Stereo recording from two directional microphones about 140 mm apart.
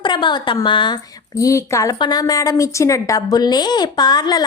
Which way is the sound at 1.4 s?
20° left (ahead or behind).